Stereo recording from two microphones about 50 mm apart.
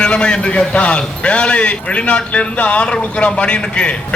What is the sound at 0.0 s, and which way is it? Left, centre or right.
A man's voice, centre.